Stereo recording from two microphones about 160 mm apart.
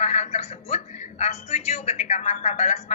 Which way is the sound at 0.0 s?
45° left (ahead or behind).